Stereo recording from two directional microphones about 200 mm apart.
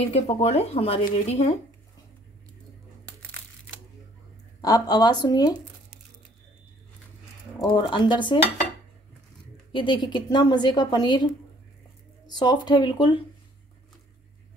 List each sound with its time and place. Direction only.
0.0 s speech: 30° left (ahead or behind)
4.6 s a woman's voice: 20° left (ahead or behind)
7.6 s a woman's voice: 20° left (ahead or behind)
9.7 s a woman's voice: 25° left (ahead or behind)
12.3 s a woman's voice: 20° left (ahead or behind)